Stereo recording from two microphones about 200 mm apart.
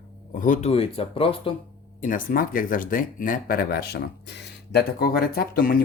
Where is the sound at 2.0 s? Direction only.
40° left (ahead or behind).